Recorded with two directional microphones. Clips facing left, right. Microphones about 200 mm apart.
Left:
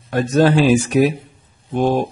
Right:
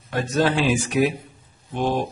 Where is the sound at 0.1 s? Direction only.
45° left (ahead or behind).